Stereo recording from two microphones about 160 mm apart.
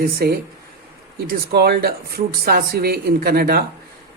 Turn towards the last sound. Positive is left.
turn(degrees=-70)  # may be behind; listen again after turning